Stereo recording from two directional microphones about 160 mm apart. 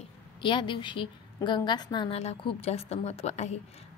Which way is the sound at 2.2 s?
40° left (ahead or behind).